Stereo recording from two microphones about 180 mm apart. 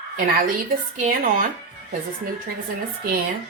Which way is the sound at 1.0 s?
50° right (ahead or behind).